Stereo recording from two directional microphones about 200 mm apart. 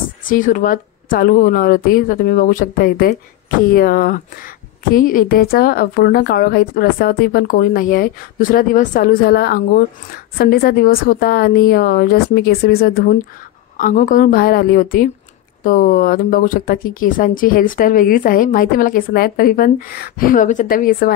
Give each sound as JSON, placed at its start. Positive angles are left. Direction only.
{"t": 0.3, "sound": "speech", "side_deg": 40}